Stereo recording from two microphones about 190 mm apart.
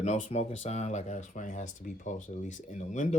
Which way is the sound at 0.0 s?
35° left (ahead or behind).